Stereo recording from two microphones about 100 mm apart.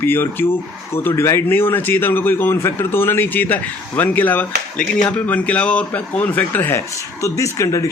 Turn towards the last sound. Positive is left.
turn(degrees=30)  # may be behind; listen again after turning